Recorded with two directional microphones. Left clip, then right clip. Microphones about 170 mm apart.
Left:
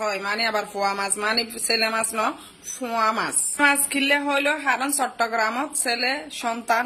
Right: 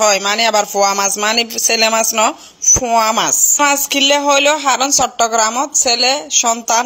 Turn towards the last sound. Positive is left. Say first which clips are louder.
# right 9 dB
turn(degrees=-35)  # may be behind; listen again after turning